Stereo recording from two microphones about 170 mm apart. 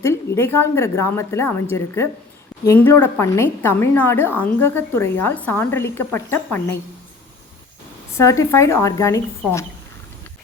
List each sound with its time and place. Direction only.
0.0 s a woman's voice: 15° left (ahead or behind)
8.1 s a woman's voice: 20° left (ahead or behind)